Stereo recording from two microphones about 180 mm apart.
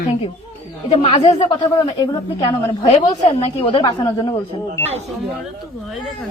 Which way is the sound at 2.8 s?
30° left (ahead or behind).